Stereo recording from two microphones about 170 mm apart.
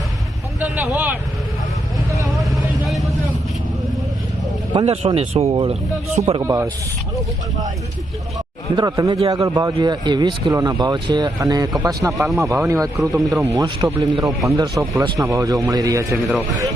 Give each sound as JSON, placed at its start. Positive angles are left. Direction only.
{"t": 0.6, "sound": "speech", "side_deg": -10}
{"t": 2.4, "sound": "vehicle", "side_deg": 0}
{"t": 4.7, "sound": "speech", "side_deg": -30}
{"t": 6.4, "sound": "speech", "side_deg": -15}
{"t": 8.7, "sound": "speech", "side_deg": -25}
{"t": 12.0, "sound": "speech", "side_deg": -10}